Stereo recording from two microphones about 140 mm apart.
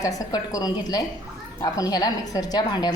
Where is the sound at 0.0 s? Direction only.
25° left (ahead or behind).